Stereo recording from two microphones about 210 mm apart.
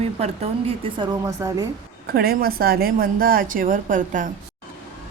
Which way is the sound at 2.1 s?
45° right (ahead or behind).